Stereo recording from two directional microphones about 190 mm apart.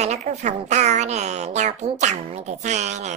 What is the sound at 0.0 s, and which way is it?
Speech, 35° right (ahead or behind).